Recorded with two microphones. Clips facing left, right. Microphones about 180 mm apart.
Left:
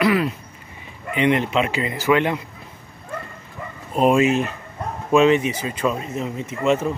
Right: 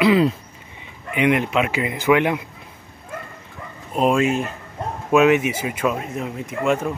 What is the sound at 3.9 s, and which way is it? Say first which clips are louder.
Speech: left 2 dB; centre (ahead or behind).